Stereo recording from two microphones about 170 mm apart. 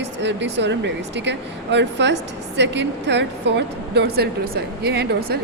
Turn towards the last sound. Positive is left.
turn(degrees=-70)  # may be behind; listen again after turning